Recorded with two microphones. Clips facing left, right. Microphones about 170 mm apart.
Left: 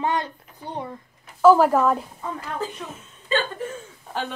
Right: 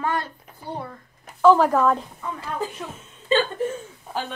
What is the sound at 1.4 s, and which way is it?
Speech, 5° left (ahead or behind).